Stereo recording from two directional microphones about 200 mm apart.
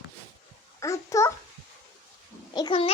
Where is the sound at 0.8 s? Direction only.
15° left (ahead or behind).